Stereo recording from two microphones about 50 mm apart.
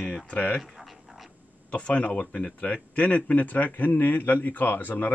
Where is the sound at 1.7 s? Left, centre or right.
Left.